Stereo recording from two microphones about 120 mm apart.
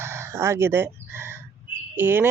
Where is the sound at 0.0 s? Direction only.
20° right (ahead or behind).